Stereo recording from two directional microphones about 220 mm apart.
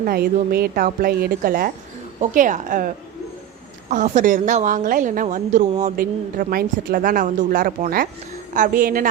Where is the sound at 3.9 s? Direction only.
35° right (ahead or behind).